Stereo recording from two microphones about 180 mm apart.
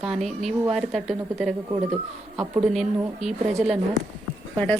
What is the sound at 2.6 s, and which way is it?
Speech, 5° right (ahead or behind).